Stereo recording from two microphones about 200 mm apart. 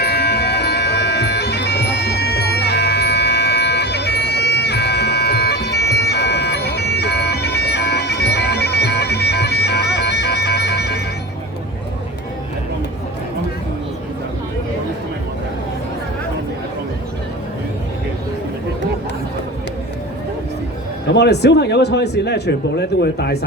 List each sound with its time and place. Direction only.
0.0 s music: 55° left (ahead or behind)
21.1 s speech: 55° left (ahead or behind)